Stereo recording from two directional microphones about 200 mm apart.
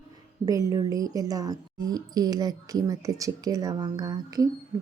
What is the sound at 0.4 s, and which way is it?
A woman's voice, 15° right (ahead or behind).